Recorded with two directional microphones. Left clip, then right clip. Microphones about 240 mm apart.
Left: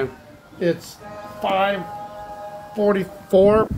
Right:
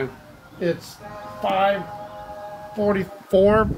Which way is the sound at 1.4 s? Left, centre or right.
Left.